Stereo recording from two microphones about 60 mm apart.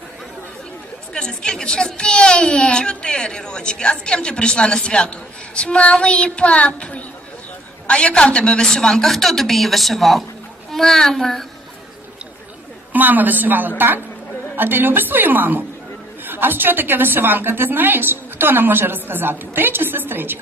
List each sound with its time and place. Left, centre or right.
1.1 s a child's voice: centre
12.9 s a woman's voice: right